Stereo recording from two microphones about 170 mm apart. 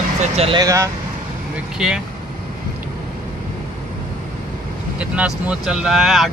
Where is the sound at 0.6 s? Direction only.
20° right (ahead or behind).